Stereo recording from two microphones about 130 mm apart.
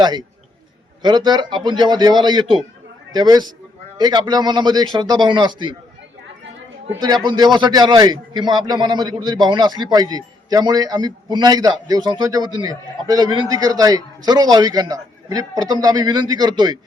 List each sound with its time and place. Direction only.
0.0 s a man's voice: 35° right (ahead or behind)
7.3 s a man's voice: 35° right (ahead or behind)